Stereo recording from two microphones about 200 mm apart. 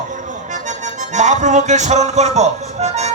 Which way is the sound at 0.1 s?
40° right (ahead or behind).